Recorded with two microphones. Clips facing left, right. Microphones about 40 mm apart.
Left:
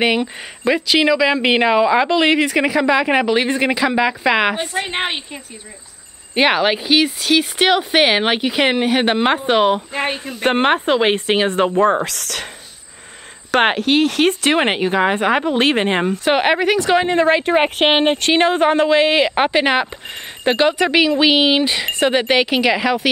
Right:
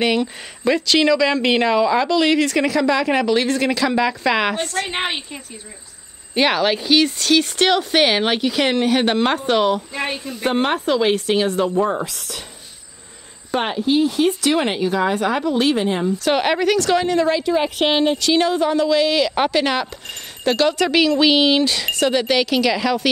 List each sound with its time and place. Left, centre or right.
0.0 s speech: centre
9.9 s a woman's voice: left
12.0 s speech: left
13.5 s speech: left
14.4 s a woman's voice: left
16.3 s a woman's voice: left